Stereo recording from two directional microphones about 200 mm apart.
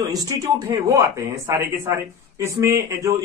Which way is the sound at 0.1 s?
15° right (ahead or behind).